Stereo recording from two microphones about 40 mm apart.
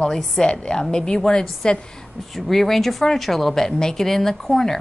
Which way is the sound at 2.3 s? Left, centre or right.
Centre.